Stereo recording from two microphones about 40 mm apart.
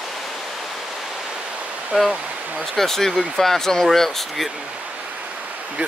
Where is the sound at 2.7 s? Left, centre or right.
Centre.